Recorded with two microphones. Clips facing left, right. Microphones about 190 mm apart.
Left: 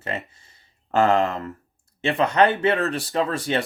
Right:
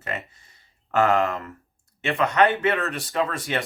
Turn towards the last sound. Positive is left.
turn(degrees=30)  # may be behind; listen again after turning